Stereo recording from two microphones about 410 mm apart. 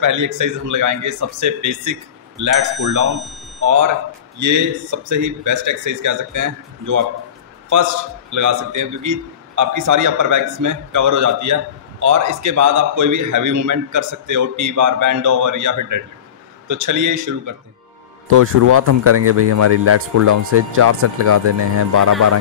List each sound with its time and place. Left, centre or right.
0.0 s a man's voice: right
3.1 s speech: centre
3.5 s a man's voice: right
18.3 s speech: right